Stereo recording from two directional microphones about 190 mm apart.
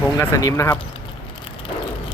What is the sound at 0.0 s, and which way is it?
Speech, 15° left (ahead or behind).